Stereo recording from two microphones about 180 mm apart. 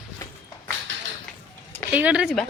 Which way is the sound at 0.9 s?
90° right.